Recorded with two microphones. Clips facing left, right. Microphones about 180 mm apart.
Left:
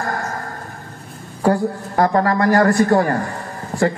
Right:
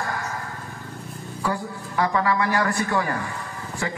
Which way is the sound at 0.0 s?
50° left (ahead or behind).